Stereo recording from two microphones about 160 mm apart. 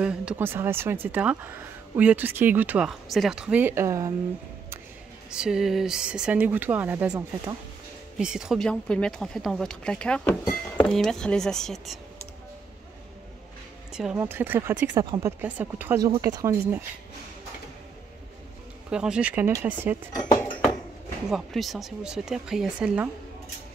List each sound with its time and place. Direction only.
0.0 s speech: 5° right (ahead or behind)
5.3 s speech: 5° right (ahead or behind)
13.9 s speech: 10° right (ahead or behind)
18.9 s speech: 5° right (ahead or behind)
21.3 s speech: centre (ahead or behind)